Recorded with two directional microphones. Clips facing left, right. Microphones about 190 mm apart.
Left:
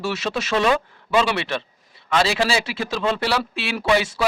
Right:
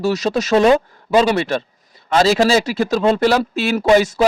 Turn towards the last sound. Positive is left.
turn(degrees=-45)  # may be behind; listen again after turning